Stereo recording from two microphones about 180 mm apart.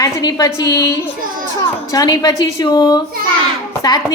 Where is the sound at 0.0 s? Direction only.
20° left (ahead or behind).